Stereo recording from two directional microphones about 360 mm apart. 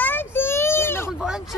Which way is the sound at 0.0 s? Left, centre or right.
Centre.